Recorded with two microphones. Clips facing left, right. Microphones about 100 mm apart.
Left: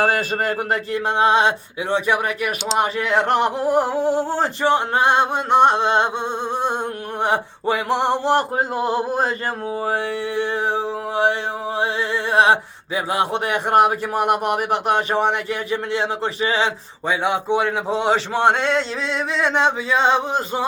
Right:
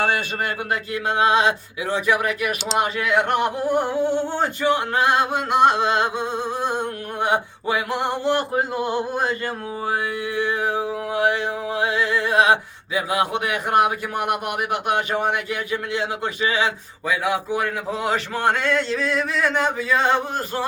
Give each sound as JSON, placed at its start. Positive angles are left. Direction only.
{"t": 0.4, "sound": "mantra", "side_deg": 30}
{"t": 2.7, "sound": "speech", "side_deg": 30}
{"t": 9.8, "sound": "mantra", "side_deg": 30}